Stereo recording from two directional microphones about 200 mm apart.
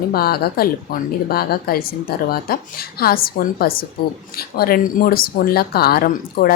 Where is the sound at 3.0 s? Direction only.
50° left (ahead or behind).